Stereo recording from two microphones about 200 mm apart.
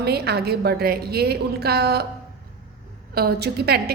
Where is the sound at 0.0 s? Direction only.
55° right (ahead or behind).